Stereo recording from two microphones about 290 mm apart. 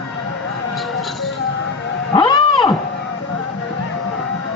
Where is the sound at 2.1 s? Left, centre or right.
Centre.